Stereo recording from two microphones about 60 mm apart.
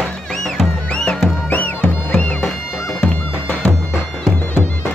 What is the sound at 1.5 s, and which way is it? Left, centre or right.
Music, left.